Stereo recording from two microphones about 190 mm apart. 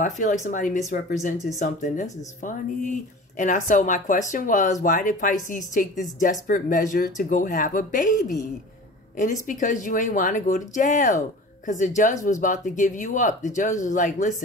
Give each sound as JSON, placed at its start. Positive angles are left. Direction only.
{"t": 0.0, "sound": "speech", "side_deg": 45}